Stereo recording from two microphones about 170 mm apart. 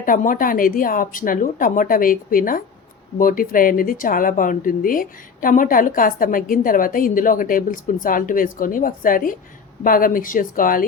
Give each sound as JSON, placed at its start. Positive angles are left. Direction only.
{"t": 0.0, "sound": "a woman's voice", "side_deg": 55}